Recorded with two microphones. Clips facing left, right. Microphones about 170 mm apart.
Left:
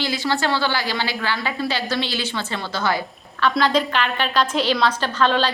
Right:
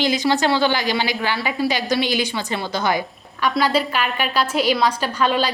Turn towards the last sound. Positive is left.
turn(degrees=-10)  # may be behind; listen again after turning